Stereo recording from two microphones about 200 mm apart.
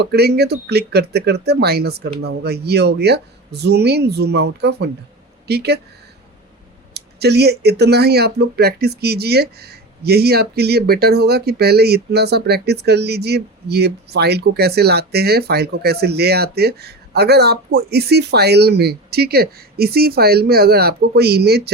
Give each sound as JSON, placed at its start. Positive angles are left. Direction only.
{"t": 0.0, "sound": "speech", "side_deg": -55}
{"t": 6.9, "sound": "speech", "side_deg": -55}